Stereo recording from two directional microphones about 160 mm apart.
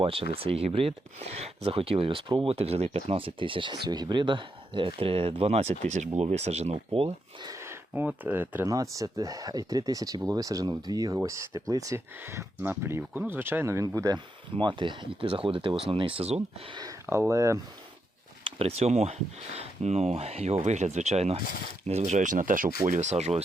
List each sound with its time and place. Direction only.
0.0 s speech: 35° right (ahead or behind)
7.4 s speech: 20° right (ahead or behind)
18.4 s speech: 40° right (ahead or behind); by 22.7 s 55° right (ahead or behind)
22.9 s speech: 45° right (ahead or behind)